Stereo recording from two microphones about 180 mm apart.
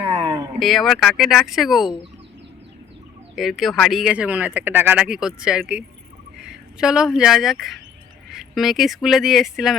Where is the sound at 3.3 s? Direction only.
Centre (ahead or behind).